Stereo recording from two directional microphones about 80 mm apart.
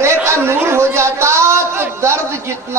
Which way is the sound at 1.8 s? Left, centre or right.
Right.